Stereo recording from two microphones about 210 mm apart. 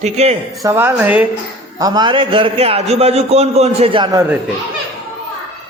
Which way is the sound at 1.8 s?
20° right (ahead or behind).